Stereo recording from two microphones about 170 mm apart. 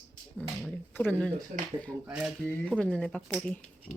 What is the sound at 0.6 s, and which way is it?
Speech, 10° left (ahead or behind).